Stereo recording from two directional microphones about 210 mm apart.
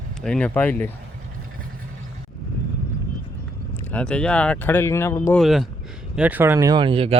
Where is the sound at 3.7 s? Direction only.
10° left (ahead or behind).